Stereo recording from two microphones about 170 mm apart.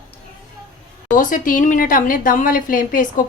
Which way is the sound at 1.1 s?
55° left (ahead or behind).